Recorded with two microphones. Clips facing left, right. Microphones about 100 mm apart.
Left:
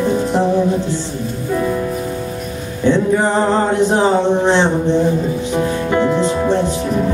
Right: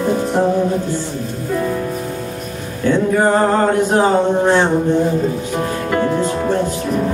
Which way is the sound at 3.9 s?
25° left (ahead or behind).